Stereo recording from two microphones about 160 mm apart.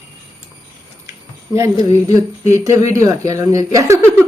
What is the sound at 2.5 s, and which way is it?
Speech, 20° right (ahead or behind).